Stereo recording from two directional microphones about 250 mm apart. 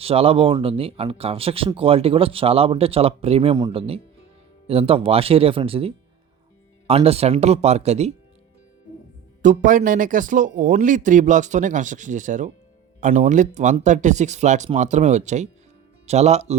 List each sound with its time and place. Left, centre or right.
0.0 s speech: right
9.4 s a man's voice: right